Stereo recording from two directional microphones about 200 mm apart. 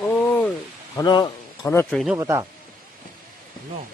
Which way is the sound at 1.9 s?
Centre (ahead or behind).